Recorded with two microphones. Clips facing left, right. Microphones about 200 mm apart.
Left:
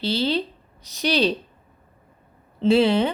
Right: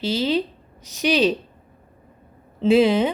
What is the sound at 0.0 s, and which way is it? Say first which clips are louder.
Speech: right 2 dB; 30° left (ahead or behind).